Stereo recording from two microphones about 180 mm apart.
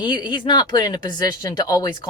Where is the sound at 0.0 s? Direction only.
25° left (ahead or behind).